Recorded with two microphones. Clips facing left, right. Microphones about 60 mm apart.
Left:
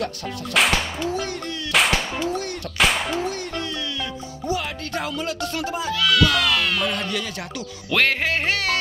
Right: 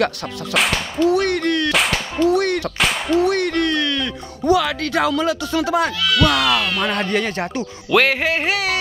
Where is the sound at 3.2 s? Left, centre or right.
Right.